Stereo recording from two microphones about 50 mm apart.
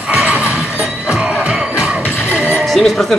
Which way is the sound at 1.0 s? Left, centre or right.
Centre.